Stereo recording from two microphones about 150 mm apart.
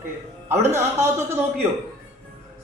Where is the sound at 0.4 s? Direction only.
15° right (ahead or behind).